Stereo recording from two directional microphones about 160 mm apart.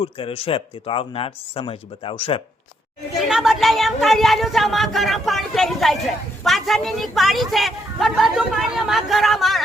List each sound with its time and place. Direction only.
0.0 s speech: 35° left (ahead or behind)
3.2 s speech: 5° right (ahead or behind)